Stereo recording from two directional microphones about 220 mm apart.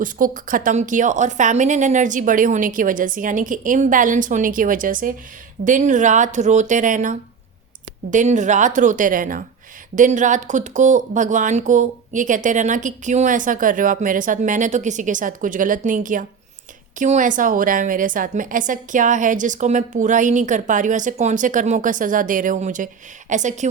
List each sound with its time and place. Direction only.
0.0 s speech: 40° right (ahead or behind)